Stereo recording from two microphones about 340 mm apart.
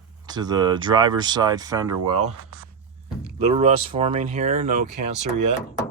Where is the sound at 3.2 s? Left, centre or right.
Centre.